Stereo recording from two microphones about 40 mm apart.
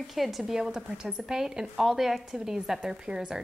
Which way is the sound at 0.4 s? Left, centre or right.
Centre.